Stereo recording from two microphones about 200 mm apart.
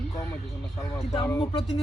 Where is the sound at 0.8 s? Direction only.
15° left (ahead or behind).